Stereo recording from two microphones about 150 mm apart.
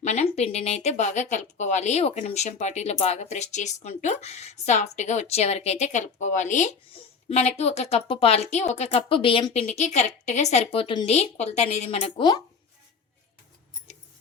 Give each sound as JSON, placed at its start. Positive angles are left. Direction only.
{"t": 0.0, "sound": "speech", "side_deg": 50}
{"t": 6.9, "sound": "speech", "side_deg": 45}